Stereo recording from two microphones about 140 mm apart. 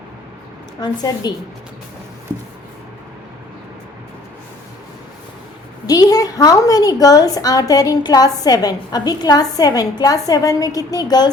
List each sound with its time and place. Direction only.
0.8 s a woman's voice: 30° left (ahead or behind)
5.8 s a woman's voice: 25° left (ahead or behind)